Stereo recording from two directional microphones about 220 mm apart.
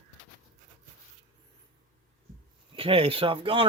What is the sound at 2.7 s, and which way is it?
Speech, 25° right (ahead or behind).